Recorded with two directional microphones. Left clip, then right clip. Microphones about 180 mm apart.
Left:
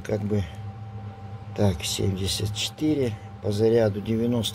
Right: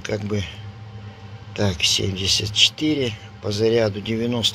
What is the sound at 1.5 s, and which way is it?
Speech, 15° left (ahead or behind).